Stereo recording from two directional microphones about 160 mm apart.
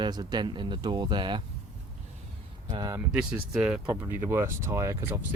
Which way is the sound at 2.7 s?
25° right (ahead or behind).